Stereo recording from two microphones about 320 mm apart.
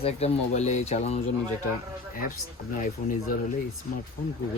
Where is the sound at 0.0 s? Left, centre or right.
Centre.